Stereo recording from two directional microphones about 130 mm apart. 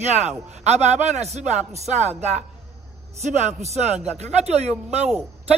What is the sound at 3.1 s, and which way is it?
Speech, 60° right (ahead or behind).